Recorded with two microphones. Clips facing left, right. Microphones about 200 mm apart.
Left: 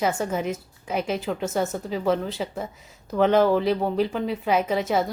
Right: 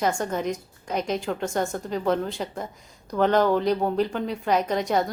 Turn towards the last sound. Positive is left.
turn(degrees=5)  # may be behind; listen again after turning